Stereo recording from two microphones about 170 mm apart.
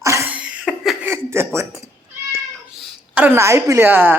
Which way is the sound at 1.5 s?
15° right (ahead or behind).